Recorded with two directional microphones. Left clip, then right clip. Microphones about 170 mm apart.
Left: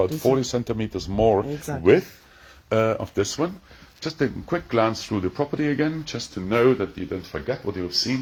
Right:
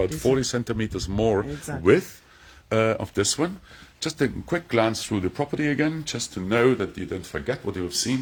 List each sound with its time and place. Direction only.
0.0 s speech: 5° right (ahead or behind)
3.0 s speech: 20° right (ahead or behind)